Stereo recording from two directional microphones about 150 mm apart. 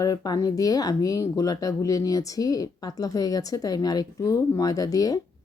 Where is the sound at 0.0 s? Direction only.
25° left (ahead or behind).